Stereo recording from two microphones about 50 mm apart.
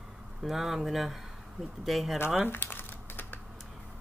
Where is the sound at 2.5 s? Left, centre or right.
Left.